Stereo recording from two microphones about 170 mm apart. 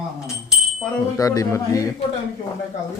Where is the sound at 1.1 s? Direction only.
20° left (ahead or behind).